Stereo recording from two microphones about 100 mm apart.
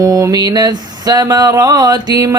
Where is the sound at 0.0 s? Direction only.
35° right (ahead or behind).